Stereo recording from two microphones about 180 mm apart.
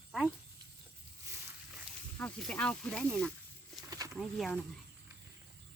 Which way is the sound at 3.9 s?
20° right (ahead or behind).